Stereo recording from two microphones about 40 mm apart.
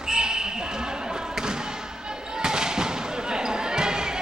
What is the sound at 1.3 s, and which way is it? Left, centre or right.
Thump, centre.